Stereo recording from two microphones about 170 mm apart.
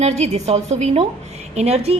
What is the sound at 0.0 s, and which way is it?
A woman's voice, 40° right (ahead or behind).